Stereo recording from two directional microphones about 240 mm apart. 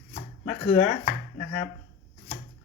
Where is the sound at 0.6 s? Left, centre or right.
Left.